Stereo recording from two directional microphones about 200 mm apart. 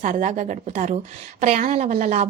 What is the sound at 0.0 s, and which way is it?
A woman's voice, 40° right (ahead or behind).